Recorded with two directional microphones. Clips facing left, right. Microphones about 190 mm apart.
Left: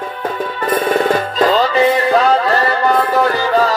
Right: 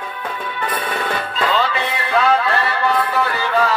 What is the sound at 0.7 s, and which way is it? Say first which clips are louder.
Music: left 10 dB; 45° left (ahead or behind).